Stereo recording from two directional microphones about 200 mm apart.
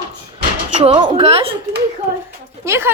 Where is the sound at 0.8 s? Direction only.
30° right (ahead or behind).